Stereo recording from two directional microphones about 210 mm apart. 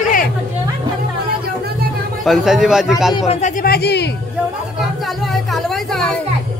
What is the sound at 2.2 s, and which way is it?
Speech, centre (ahead or behind).